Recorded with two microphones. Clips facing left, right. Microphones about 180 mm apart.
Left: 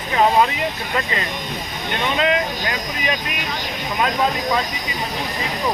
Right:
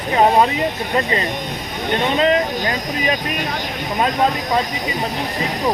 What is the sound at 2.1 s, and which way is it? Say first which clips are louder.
Speech: right 3 dB; 35° right (ahead or behind).